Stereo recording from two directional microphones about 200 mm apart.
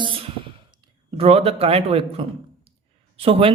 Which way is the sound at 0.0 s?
25° right (ahead or behind).